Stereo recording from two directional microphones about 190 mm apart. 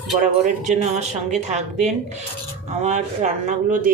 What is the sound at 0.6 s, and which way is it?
Speech, 35° right (ahead or behind).